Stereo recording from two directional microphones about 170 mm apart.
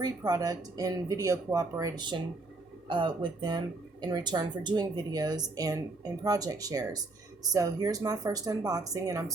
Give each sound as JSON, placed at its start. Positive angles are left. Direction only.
{"t": 0.0, "sound": "speech", "side_deg": -20}